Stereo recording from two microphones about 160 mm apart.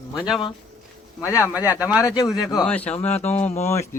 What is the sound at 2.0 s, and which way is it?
Speech, 20° left (ahead or behind).